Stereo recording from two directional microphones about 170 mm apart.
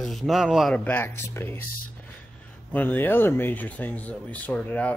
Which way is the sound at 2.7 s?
10° left (ahead or behind).